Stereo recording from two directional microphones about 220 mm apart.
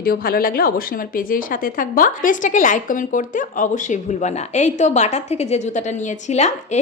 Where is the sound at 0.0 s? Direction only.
40° left (ahead or behind).